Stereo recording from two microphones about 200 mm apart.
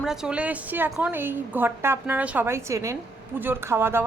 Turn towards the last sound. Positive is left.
turn(degrees=-10)  # may be behind; listen again after turning